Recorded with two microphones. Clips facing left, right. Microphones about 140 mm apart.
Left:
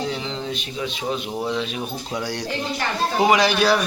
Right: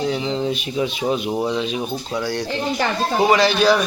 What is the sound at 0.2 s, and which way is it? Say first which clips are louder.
A man's voice: right 6 dB; 10° right (ahead or behind).